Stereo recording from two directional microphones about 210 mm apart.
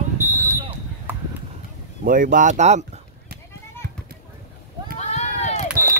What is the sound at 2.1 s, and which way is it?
Speech, 40° right (ahead or behind).